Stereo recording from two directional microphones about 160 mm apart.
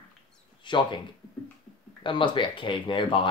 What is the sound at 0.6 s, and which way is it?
Speech, 30° left (ahead or behind).